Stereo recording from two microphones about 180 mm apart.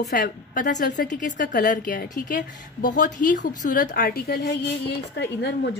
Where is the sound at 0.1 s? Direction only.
60° left (ahead or behind).